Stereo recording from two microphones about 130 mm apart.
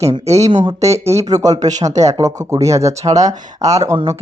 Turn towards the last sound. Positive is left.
turn(degrees=-25)  # may be behind; listen again after turning